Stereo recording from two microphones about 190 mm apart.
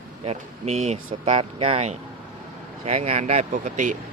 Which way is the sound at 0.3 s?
35° right (ahead or behind).